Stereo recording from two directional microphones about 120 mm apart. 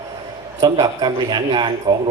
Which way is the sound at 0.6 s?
35° right (ahead or behind).